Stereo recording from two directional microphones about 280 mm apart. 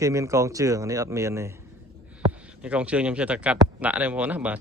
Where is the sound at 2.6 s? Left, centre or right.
Centre.